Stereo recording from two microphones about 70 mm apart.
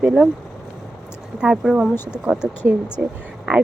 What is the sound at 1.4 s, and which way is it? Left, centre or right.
Speech, centre.